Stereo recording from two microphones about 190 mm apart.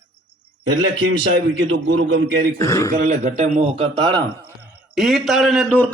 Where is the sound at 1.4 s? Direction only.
70° right (ahead or behind).